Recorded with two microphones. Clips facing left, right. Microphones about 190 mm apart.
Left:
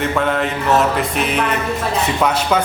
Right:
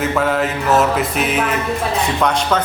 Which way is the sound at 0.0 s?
Centre (ahead or behind).